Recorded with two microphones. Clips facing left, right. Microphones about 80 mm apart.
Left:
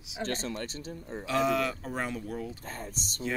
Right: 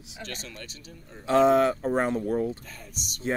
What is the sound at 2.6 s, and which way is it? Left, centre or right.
Speech, left.